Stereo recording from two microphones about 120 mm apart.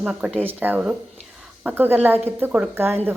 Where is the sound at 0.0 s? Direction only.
10° right (ahead or behind).